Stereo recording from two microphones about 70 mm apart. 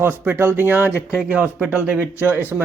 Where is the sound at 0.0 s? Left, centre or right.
Right.